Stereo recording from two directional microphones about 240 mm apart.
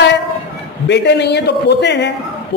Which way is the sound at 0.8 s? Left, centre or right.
Left.